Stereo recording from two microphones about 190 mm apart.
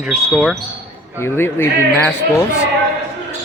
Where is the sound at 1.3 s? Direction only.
10° left (ahead or behind).